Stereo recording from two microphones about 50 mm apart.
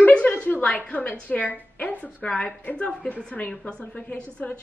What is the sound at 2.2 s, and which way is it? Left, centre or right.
Speech, left.